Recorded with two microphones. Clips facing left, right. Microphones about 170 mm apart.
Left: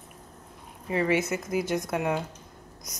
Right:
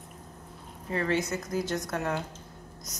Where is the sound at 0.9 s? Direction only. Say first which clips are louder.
Left 3 dB; 15° left (ahead or behind).